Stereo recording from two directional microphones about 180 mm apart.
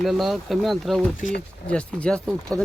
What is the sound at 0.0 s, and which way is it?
Speech, centre (ahead or behind).